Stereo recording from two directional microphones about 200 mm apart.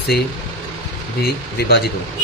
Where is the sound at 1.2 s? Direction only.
50° left (ahead or behind).